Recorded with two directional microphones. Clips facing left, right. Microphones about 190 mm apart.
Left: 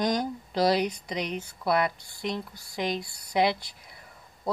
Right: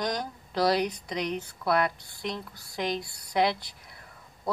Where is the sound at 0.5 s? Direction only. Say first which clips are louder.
Left 1 dB; 15° left (ahead or behind).